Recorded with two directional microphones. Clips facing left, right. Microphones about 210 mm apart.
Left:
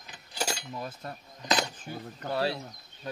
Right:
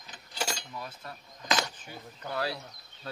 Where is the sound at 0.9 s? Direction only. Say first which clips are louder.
Left 4 dB; 40° left (ahead or behind).